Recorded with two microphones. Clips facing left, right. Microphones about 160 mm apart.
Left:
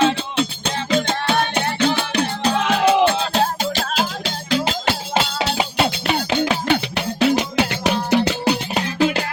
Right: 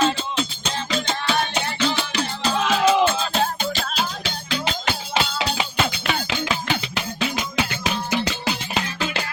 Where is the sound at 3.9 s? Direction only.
90° left.